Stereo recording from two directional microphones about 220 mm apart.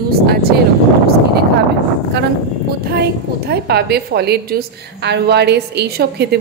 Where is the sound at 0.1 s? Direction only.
45° right (ahead or behind).